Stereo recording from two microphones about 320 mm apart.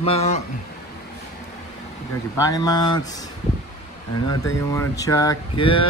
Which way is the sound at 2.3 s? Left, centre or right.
Centre.